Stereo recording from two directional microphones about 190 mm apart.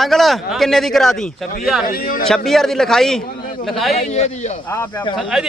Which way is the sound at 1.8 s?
45° left (ahead or behind).